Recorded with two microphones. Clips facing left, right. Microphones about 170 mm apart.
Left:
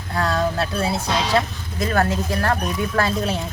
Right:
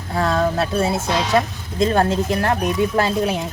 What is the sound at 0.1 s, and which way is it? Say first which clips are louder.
Speech: right 3 dB; 25° right (ahead or behind).